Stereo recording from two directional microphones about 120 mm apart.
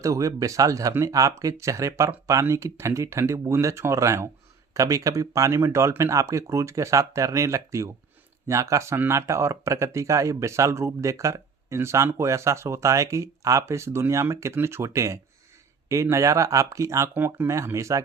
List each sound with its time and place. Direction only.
0.0 s speech: 25° right (ahead or behind)